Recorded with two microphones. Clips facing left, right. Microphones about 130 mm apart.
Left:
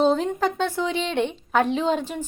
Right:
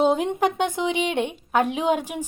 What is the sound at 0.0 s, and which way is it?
A woman's voice, 15° right (ahead or behind).